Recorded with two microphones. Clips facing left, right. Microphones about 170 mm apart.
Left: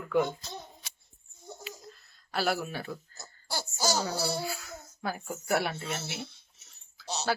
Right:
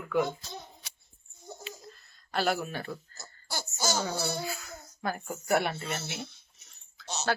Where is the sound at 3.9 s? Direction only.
5° left (ahead or behind).